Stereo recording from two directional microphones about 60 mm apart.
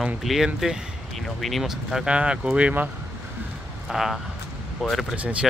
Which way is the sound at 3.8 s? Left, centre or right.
Centre.